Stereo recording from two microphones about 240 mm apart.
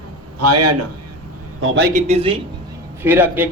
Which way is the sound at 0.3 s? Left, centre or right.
Right.